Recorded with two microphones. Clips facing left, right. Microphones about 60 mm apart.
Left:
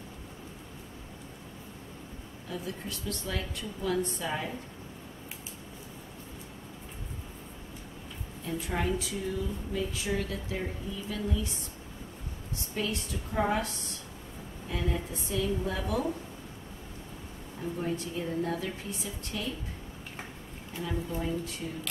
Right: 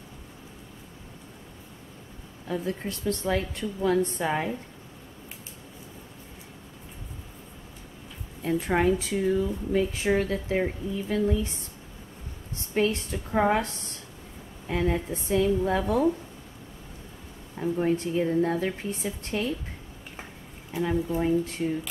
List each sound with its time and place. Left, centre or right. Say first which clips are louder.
2.4 s a woman's voice: right 8 dB; right
8.5 s speech: right 8 dB; right
12.7 s a woman's voice: right 8 dB; right
14.7 s speech: right 7 dB; right
15.8 s a woman's voice: right 7 dB; right
17.6 s a woman's voice: right 8 dB; right
21.2 s speech: right 8 dB; right